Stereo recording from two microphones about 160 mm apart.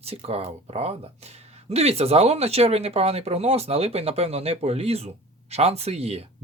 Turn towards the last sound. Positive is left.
turn(degrees=-40)  # may be behind; listen again after turning